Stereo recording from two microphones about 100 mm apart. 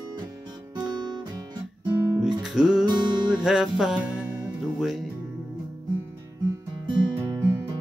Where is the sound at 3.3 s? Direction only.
5° right (ahead or behind).